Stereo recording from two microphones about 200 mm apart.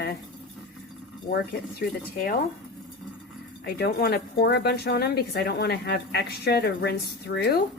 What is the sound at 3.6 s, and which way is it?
A woman's voice, 50° left (ahead or behind).